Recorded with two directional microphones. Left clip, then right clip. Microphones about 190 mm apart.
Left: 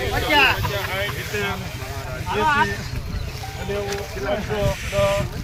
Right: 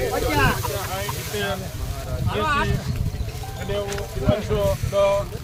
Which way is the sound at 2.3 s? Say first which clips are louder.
Left 4 dB; 55° right (ahead or behind).